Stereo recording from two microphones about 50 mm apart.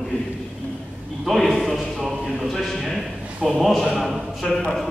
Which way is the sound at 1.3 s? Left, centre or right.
Centre.